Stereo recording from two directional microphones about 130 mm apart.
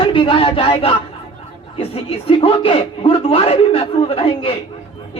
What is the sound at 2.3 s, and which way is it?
A man's voice, 45° left (ahead or behind).